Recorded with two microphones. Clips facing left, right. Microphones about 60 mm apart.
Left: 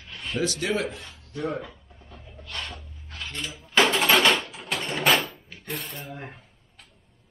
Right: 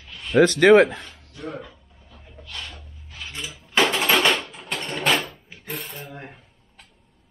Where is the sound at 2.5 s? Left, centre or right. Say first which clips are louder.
Left 2 dB; left.